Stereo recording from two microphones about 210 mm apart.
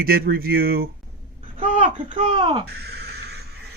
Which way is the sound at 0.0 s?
45° right (ahead or behind).